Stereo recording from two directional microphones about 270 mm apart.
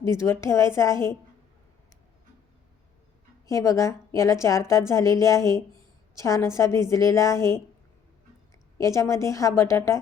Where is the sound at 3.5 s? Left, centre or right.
Centre.